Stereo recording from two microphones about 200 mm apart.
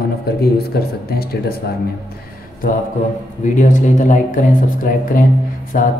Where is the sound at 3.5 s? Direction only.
40° left (ahead or behind).